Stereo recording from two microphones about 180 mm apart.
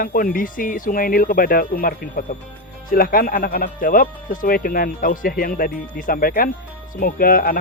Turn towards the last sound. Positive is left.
turn(degrees=55)  # may be behind; listen again after turning